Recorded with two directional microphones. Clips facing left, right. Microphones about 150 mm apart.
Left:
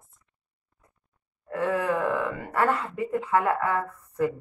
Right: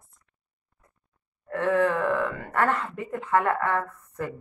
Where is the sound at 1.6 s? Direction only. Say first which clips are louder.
Right 2 dB; 10° left (ahead or behind).